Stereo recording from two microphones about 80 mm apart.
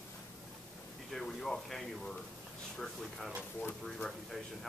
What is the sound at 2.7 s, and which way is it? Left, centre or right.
Speech, centre.